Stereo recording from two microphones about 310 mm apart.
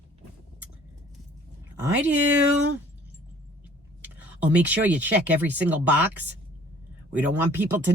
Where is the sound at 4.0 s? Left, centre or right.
Centre.